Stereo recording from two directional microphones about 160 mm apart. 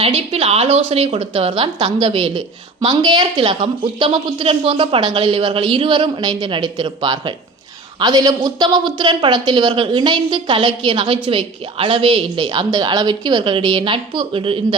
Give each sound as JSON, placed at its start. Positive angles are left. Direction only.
{"t": 0.0, "sound": "a woman's voice", "side_deg": -35}